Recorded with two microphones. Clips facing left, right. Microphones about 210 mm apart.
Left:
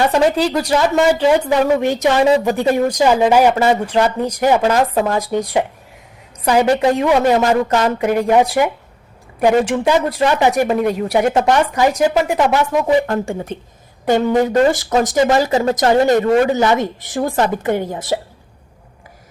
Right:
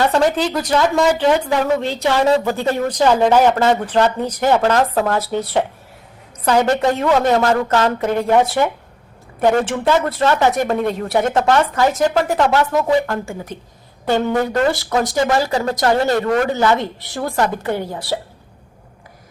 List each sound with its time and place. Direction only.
0.0 s a woman's voice: 15° left (ahead or behind)
13.2 s speech: 25° left (ahead or behind)
14.0 s a woman's voice: 15° left (ahead or behind)